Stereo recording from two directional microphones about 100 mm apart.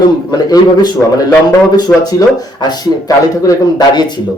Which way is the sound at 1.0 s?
10° left (ahead or behind).